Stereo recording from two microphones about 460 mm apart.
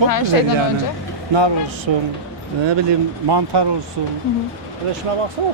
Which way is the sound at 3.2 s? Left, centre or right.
Right.